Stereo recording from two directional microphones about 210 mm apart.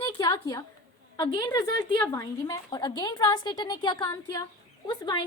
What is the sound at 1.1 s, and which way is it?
A woman's voice, 20° left (ahead or behind).